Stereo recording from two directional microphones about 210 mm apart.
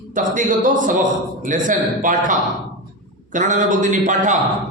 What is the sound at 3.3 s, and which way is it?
A man's voice, 35° right (ahead or behind).